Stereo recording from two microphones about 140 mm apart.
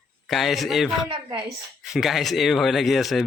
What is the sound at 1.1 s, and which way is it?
Speech, 35° right (ahead or behind).